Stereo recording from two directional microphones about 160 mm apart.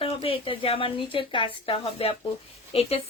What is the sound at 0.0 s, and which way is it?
Speech, 35° left (ahead or behind).